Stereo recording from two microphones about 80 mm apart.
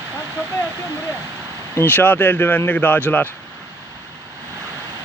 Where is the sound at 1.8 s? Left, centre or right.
Left.